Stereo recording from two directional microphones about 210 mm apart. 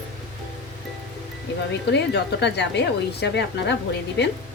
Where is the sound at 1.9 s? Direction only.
55° left (ahead or behind).